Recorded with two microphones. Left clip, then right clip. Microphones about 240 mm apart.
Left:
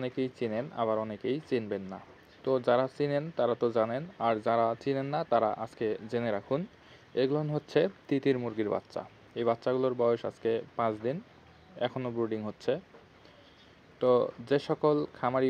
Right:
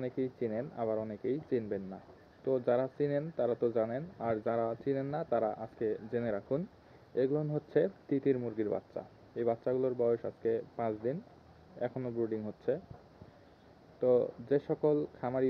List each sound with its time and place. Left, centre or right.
0.0 s speech: left
13.9 s speech: left